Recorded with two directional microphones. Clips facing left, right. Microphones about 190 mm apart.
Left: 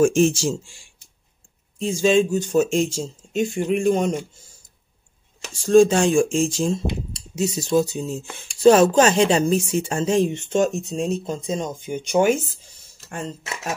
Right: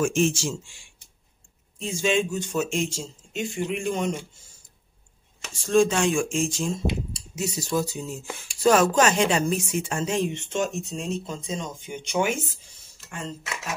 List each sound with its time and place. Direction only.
0.0 s speech: 40° left (ahead or behind)
5.6 s speech: 35° left (ahead or behind)
7.3 s speech: 25° left (ahead or behind); by 12.4 s 40° left (ahead or behind)